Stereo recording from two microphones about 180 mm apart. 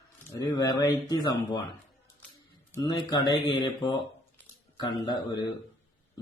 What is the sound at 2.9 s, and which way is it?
Speech, 20° left (ahead or behind).